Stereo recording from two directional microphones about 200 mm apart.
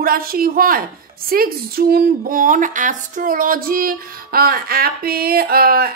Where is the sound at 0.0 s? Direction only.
45° right (ahead or behind).